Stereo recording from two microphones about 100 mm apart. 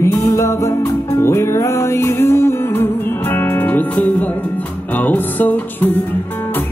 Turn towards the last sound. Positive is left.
turn(degrees=15)  # may be behind; listen again after turning